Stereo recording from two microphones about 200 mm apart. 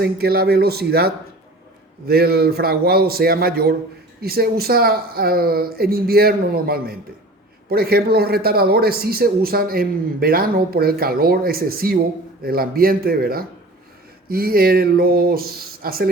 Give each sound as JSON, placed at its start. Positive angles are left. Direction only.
{"t": 0.0, "sound": "a man's voice", "side_deg": -50}